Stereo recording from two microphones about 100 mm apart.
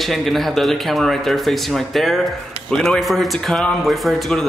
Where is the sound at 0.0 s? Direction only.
Centre (ahead or behind).